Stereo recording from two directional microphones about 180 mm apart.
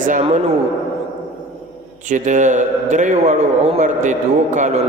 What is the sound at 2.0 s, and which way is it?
A man's voice, 45° right (ahead or behind).